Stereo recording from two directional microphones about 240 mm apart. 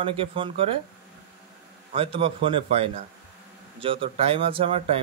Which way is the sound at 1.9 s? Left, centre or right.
Right.